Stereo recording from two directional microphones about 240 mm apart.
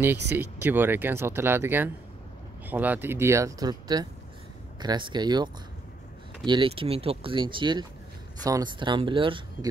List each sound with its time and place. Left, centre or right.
0.3 s speech: centre